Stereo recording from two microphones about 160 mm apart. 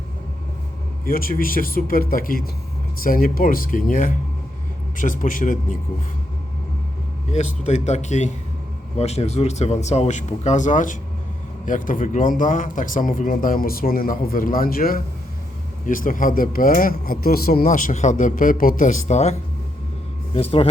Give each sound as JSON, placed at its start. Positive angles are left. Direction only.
{"t": 1.0, "sound": "speech", "side_deg": 65}
{"t": 7.3, "sound": "speech", "side_deg": 45}
{"t": 20.3, "sound": "speech", "side_deg": 35}